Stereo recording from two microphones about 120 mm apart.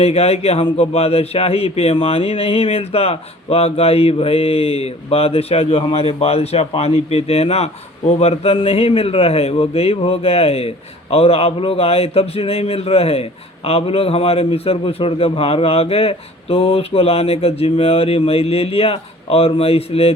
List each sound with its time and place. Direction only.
0.0 s a man's voice: 60° left (ahead or behind)